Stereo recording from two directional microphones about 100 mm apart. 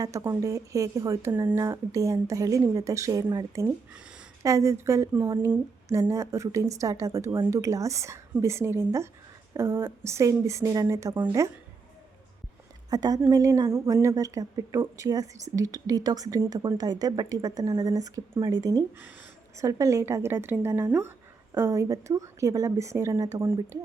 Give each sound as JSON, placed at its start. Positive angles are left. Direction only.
{"t": 0.0, "sound": "a woman's voice", "side_deg": -30}
{"t": 12.9, "sound": "a woman's voice", "side_deg": -40}